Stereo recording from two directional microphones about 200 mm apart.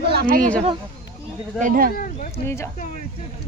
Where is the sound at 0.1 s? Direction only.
50° right (ahead or behind).